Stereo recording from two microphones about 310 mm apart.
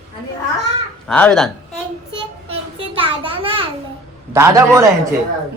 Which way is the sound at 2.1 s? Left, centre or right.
Centre.